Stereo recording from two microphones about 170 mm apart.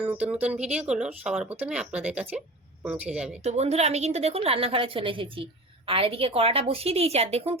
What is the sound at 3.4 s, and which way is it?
A woman's voice, 40° right (ahead or behind).